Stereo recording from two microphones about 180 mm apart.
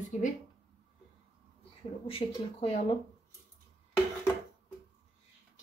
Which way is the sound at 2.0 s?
30° left (ahead or behind).